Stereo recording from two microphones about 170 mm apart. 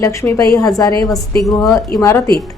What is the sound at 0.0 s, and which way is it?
A woman's voice, 20° left (ahead or behind).